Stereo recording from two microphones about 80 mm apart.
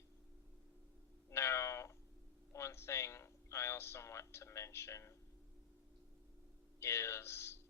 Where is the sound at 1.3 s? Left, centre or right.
Left.